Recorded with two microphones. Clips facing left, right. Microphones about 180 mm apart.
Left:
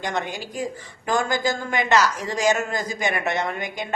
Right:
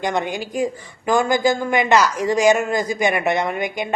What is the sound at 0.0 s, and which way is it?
A man's voice, 15° right (ahead or behind).